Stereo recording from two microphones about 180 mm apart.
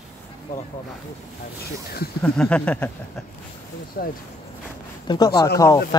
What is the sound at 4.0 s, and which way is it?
Speech, 55° left (ahead or behind).